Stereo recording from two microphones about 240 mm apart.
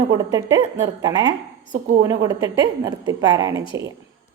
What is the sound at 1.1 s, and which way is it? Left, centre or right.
A woman's voice, centre.